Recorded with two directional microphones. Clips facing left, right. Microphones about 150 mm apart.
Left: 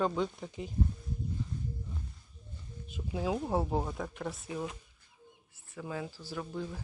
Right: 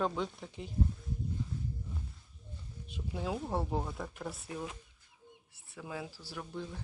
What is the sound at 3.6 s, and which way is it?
Speech, 15° left (ahead or behind).